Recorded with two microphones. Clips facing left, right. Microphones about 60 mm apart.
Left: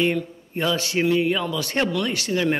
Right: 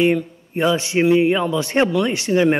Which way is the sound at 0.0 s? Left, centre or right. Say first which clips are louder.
Right 5 dB; centre.